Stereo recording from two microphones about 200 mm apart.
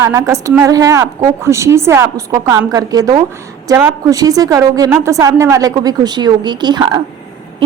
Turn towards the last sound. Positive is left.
turn(degrees=-20)  # may be behind; listen again after turning